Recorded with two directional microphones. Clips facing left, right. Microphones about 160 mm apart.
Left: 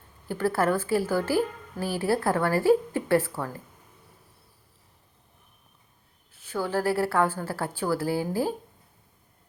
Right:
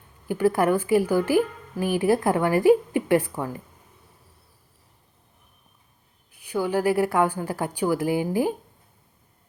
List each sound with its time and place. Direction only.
0.3 s a woman's voice: 15° right (ahead or behind)
6.3 s a woman's voice: 15° right (ahead or behind)